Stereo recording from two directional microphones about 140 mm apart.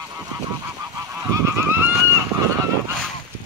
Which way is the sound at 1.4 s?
20° right (ahead or behind).